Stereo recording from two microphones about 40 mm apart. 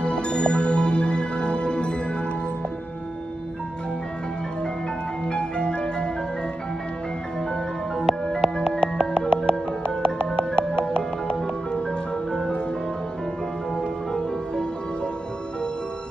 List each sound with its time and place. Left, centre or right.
0.0 s music: left
5.2 s music: left
7.3 s music: centre
13.7 s music: left